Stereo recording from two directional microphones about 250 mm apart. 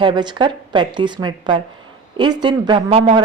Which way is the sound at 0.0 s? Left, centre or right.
Centre.